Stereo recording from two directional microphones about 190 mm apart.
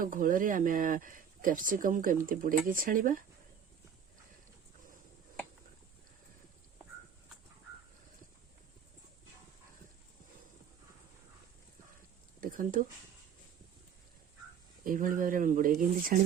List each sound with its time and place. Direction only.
0.0 s speech: 45° right (ahead or behind)
12.4 s a sound: 45° right (ahead or behind)
14.8 s speech: 45° right (ahead or behind)